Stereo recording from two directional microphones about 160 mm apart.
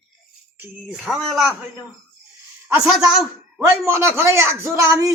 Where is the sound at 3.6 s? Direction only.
15° right (ahead or behind).